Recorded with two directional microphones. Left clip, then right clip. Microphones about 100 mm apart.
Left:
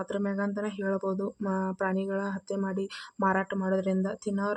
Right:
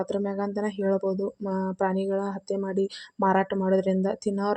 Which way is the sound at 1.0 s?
5° right (ahead or behind).